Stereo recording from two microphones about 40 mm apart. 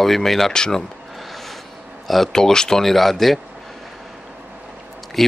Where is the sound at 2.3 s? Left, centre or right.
Centre.